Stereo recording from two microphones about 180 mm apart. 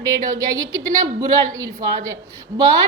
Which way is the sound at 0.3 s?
20° right (ahead or behind).